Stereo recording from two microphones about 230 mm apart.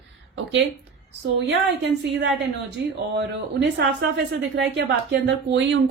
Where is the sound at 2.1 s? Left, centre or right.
Right.